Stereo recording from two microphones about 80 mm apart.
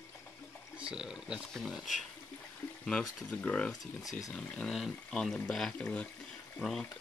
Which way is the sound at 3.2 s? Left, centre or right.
Centre.